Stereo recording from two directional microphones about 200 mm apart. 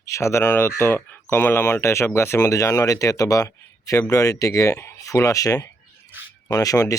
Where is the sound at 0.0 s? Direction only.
15° left (ahead or behind).